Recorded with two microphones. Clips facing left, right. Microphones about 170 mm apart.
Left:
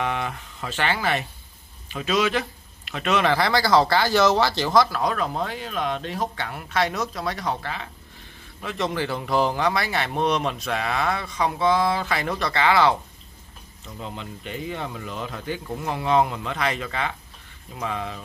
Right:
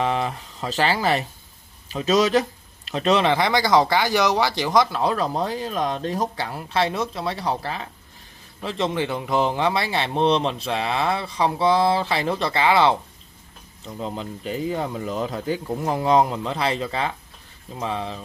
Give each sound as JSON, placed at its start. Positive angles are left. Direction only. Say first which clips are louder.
{"t": 0.0, "sound": "speech", "louder": "right 4 dB", "side_deg": -30}
{"t": 5.0, "sound": "speech", "louder": "right 3 dB", "side_deg": -35}
{"t": 13.8, "sound": "speech", "louder": "right 5 dB", "side_deg": -35}